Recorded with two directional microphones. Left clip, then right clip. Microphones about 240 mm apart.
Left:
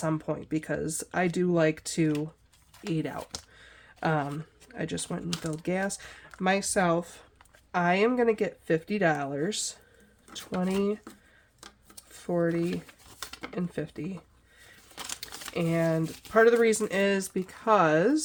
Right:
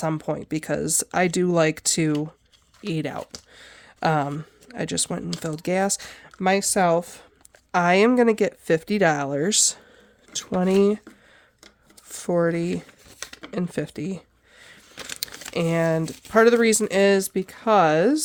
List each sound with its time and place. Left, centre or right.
0.0 s speech: right
12.1 s speech: right
15.5 s speech: right